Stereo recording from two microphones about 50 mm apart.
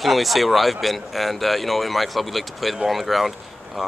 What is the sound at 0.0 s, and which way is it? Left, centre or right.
Speech, centre.